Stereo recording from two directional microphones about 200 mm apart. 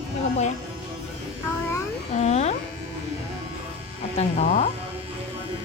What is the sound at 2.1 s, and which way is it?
Insect, 35° left (ahead or behind).